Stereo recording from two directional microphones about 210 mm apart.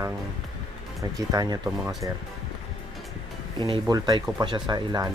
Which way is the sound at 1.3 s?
20° right (ahead or behind).